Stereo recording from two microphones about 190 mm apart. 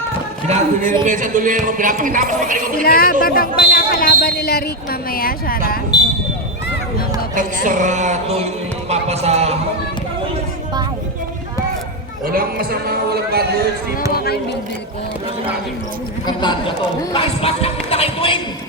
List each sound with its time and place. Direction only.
0.4 s a sound: 40° right (ahead or behind)
1.0 s speech: 40° right (ahead or behind)
2.8 s speech: 50° left (ahead or behind)
7.6 s a sound: 40° right (ahead or behind)
12.2 s speech: 50° right (ahead or behind)
14.1 s speech: 55° left (ahead or behind)
16.2 s speech: 25° left (ahead or behind)